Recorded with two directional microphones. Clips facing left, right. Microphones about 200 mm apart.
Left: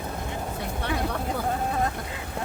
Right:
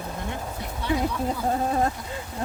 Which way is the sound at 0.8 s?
60° left (ahead or behind).